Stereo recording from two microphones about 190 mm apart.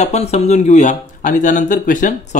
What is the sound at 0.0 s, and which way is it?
Speech, 35° left (ahead or behind).